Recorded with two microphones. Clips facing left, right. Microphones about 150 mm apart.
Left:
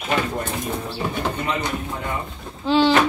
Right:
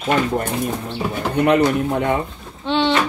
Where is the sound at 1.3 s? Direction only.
65° right (ahead or behind).